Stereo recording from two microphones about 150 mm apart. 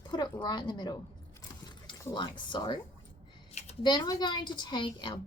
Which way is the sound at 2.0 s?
30° left (ahead or behind).